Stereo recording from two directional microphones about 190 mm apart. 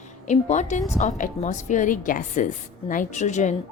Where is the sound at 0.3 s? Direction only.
40° left (ahead or behind).